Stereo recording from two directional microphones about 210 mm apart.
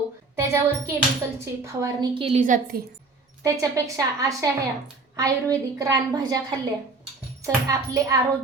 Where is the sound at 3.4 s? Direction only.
15° right (ahead or behind).